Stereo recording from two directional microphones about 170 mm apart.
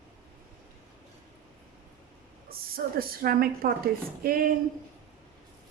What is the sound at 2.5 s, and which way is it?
A woman's voice, 60° right (ahead or behind).